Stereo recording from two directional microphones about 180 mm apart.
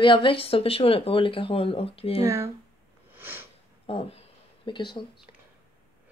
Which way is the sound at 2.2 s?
15° right (ahead or behind).